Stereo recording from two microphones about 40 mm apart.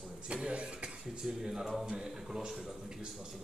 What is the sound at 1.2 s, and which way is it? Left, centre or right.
A man's voice, centre.